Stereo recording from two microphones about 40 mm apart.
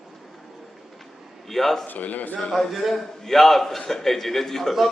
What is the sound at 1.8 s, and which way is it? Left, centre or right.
Speech, left.